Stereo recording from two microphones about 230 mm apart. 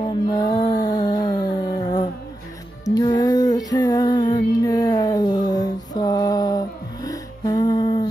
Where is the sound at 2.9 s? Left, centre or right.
Centre.